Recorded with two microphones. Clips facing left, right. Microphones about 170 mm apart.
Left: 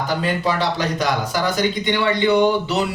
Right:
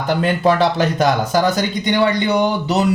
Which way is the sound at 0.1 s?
55° right (ahead or behind).